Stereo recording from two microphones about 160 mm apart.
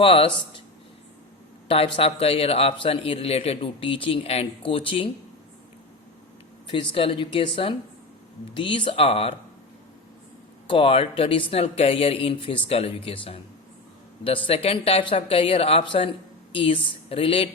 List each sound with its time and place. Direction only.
0.0 s a man's voice: 35° left (ahead or behind)
1.6 s a man's voice: 35° left (ahead or behind)
6.7 s a man's voice: 35° left (ahead or behind)
10.7 s a man's voice: 35° left (ahead or behind)